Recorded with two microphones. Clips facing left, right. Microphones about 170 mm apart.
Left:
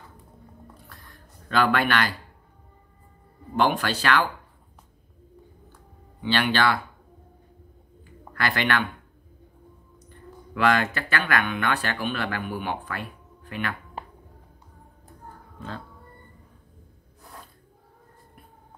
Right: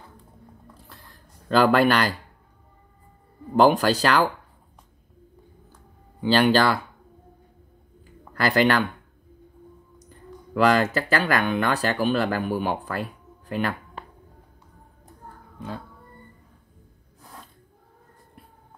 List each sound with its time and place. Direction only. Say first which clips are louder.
1.5 s speech: right 5 dB; 35° right (ahead or behind)
3.5 s speech: right 6 dB; 40° right (ahead or behind)
6.2 s speech: right 4 dB; 40° right (ahead or behind)
8.4 s speech: right 5 dB; 35° right (ahead or behind)
10.0 s speech: right 1 dB; 35° right (ahead or behind)